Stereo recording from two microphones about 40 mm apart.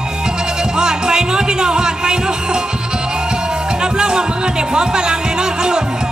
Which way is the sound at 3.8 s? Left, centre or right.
Centre.